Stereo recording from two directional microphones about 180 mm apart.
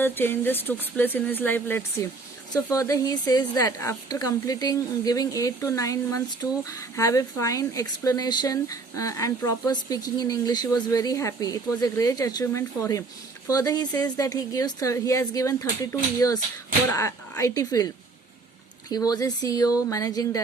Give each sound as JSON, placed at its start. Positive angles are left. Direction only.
{"t": 0.0, "sound": "a woman's voice", "side_deg": 10}